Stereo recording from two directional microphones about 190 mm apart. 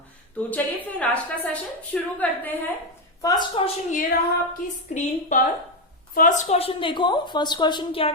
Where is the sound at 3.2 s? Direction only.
20° left (ahead or behind).